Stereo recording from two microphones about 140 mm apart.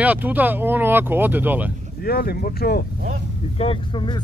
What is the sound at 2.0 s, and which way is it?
Speech, 90° left.